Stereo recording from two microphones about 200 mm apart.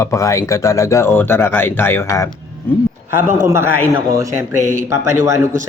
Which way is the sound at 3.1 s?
10° right (ahead or behind).